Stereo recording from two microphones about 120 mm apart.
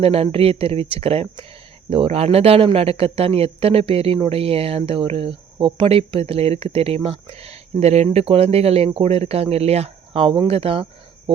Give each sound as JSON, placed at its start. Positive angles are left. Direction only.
{"t": 0.0, "sound": "speech", "side_deg": -55}